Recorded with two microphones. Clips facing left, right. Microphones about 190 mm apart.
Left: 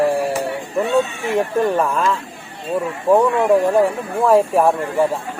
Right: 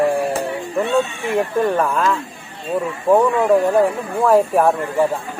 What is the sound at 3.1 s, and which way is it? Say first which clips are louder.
Speech: even; centre (ahead or behind).